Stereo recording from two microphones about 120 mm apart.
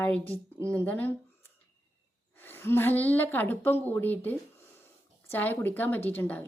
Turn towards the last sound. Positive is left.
turn(degrees=15)  # may be behind; listen again after turning